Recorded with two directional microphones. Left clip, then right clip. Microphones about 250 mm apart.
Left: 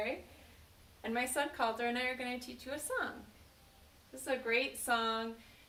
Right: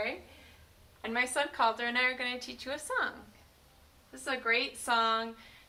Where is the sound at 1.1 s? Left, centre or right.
Centre.